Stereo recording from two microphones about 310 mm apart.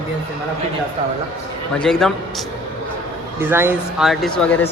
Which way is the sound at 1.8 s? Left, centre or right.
Centre.